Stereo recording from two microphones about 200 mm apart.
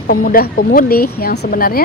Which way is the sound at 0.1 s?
45° left (ahead or behind).